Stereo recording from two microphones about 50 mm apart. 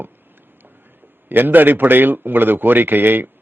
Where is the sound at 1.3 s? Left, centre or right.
Right.